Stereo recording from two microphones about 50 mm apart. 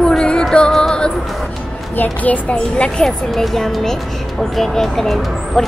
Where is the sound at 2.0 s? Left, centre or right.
Left.